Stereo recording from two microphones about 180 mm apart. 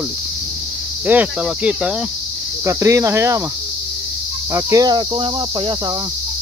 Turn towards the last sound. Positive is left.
turn(degrees=-25)  # may be behind; listen again after turning